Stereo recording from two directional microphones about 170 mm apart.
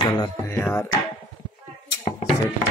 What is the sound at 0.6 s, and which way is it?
Music, 5° left (ahead or behind).